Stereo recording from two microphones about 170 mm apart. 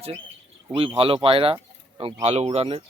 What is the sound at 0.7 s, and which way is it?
Speech, 30° right (ahead or behind).